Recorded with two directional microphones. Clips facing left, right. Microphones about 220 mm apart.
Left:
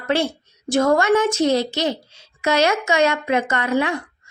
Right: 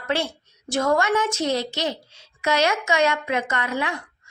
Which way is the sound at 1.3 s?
25° left (ahead or behind).